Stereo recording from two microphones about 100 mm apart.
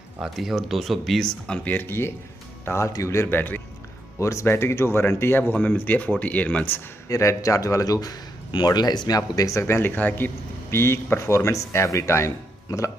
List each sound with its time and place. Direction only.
0.2 s speech: 5° right (ahead or behind)
1.6 s speech: 20° left (ahead or behind)
4.2 s speech: 30° left (ahead or behind)
7.1 s a man's voice: 35° left (ahead or behind)